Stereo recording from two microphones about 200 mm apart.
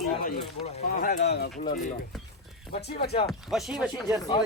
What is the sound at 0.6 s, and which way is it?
Speech, 45° left (ahead or behind).